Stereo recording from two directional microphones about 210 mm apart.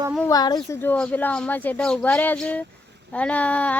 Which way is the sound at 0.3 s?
20° left (ahead or behind).